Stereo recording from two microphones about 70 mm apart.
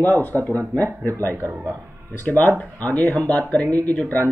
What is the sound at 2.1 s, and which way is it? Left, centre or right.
Speech, left.